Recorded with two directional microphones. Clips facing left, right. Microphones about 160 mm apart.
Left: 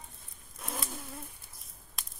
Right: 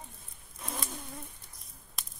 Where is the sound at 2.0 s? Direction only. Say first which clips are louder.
Even; centre (ahead or behind).